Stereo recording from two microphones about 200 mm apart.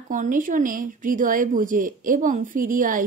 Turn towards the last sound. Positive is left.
turn(degrees=-40)  # may be behind; listen again after turning